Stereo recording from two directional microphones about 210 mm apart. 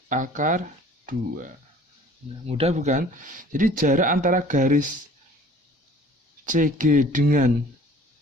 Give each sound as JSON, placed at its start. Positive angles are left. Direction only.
{"t": 0.1, "sound": "speech", "side_deg": -35}
{"t": 2.5, "sound": "speech", "side_deg": -30}
{"t": 6.4, "sound": "speech", "side_deg": -40}